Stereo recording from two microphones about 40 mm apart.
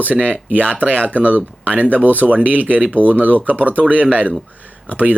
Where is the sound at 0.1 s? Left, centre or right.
Right.